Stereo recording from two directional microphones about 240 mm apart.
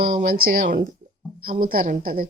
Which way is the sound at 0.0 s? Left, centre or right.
Right.